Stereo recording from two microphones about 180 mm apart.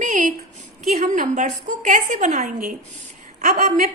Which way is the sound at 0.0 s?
45° right (ahead or behind).